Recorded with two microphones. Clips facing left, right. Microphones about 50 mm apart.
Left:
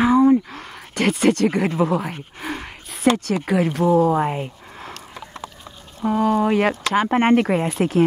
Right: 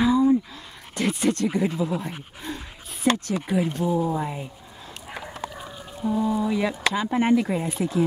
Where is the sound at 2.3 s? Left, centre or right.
Left.